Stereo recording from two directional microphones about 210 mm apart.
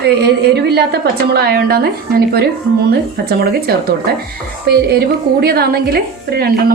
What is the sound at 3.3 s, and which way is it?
A woman's voice, 45° right (ahead or behind).